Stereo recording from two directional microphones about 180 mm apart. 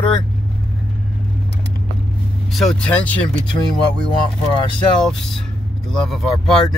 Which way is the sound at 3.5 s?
25° left (ahead or behind).